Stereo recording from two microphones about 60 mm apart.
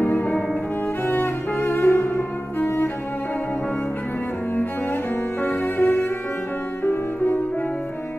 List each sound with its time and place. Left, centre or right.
0.0 s music: left
1.0 s cello: left
5.4 s music: left